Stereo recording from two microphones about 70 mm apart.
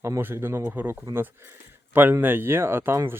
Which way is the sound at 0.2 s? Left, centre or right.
Right.